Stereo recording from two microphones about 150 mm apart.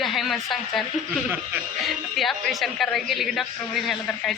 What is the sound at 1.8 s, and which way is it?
A woman's voice, centre (ahead or behind).